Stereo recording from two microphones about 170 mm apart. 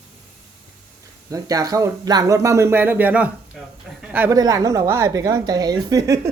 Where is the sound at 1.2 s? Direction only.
20° right (ahead or behind).